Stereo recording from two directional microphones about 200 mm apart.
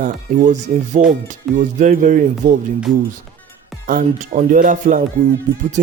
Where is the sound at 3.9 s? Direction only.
40° right (ahead or behind).